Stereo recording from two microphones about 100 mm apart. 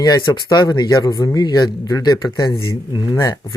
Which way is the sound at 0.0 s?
45° left (ahead or behind).